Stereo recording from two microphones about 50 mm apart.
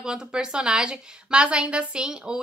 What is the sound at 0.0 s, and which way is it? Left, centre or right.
A woman's voice, centre.